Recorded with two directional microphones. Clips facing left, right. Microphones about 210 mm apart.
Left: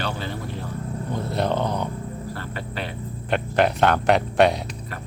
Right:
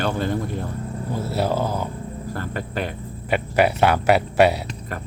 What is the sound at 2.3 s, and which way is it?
Cricket, 45° right (ahead or behind).